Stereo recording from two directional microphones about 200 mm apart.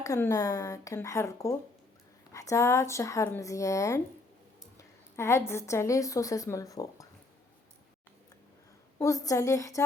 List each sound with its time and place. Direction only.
0.0 s a woman's voice: 15° left (ahead or behind)
9.0 s speech: 15° left (ahead or behind)